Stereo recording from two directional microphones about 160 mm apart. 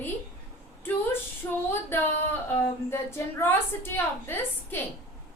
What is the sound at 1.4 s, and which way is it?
Speech, 15° left (ahead or behind).